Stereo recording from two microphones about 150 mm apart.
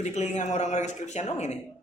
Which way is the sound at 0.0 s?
50° left (ahead or behind).